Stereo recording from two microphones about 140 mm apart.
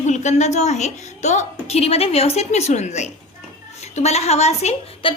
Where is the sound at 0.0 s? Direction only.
60° left (ahead or behind).